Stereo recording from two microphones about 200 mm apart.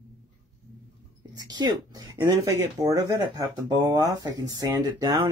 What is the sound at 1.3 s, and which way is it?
Speech, 20° right (ahead or behind).